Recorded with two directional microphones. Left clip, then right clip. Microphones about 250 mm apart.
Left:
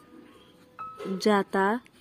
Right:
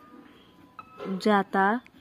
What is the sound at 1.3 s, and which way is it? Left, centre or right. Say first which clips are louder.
Speech: right 3 dB; centre.